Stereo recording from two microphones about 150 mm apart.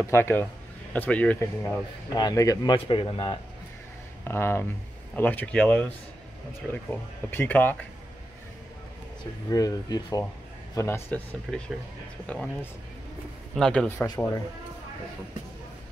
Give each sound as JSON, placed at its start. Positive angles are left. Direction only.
{"t": 0.0, "sound": "speech", "side_deg": 15}
{"t": 4.2, "sound": "speech", "side_deg": 15}
{"t": 9.5, "sound": "speech", "side_deg": 25}
{"t": 13.6, "sound": "speech", "side_deg": 5}
{"t": 14.0, "sound": "speech", "side_deg": 25}